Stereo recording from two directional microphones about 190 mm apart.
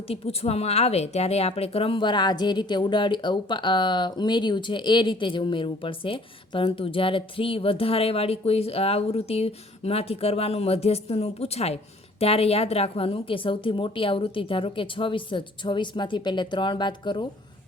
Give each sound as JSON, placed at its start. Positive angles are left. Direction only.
{"t": 0.1, "sound": "a woman's voice", "side_deg": 30}